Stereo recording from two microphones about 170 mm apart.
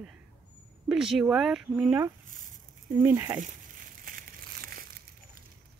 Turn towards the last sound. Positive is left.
turn(degrees=-60)  # may be behind; listen again after turning